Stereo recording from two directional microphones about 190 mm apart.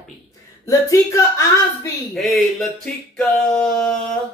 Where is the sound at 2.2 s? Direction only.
Centre (ahead or behind).